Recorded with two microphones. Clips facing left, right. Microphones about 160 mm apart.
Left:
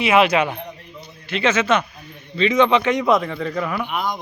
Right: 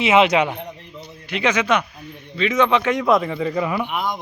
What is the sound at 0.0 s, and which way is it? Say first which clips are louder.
A man's voice: right 1 dB; 20° right (ahead or behind).